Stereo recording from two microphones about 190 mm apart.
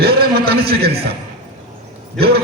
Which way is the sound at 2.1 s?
55° right (ahead or behind).